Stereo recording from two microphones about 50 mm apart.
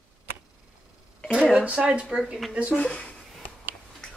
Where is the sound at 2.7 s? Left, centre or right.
Left.